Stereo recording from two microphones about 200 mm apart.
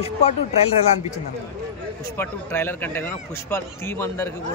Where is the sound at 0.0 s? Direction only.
35° left (ahead or behind).